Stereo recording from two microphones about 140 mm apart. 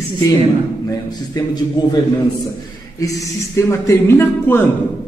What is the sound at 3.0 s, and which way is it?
Speech, 25° left (ahead or behind).